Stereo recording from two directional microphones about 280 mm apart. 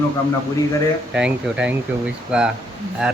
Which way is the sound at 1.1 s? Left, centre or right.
Centre.